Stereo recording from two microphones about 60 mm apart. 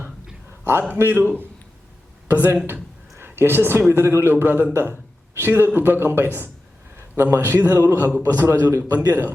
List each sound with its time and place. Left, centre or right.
0.6 s a sound: right
0.9 s a man's voice: right
2.3 s a man's voice: right
8.9 s a man's voice: right